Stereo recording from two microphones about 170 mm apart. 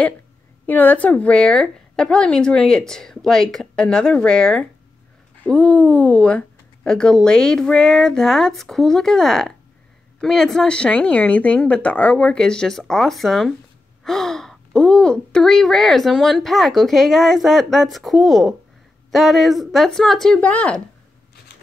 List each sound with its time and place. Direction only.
0.7 s speech: 10° left (ahead or behind)